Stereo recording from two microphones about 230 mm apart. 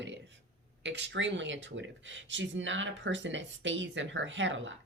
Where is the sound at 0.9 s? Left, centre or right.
Right.